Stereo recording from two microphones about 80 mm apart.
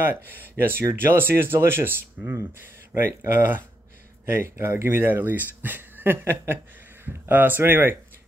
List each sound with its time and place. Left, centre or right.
0.0 s speech: right